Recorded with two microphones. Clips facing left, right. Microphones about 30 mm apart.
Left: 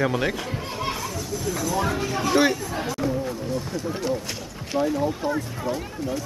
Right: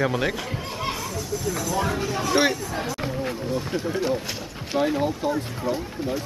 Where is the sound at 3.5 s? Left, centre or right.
Right.